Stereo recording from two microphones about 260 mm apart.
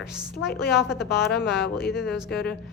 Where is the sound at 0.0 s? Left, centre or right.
Centre.